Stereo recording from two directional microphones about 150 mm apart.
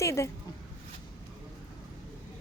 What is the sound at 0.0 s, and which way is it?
Speech, 20° left (ahead or behind).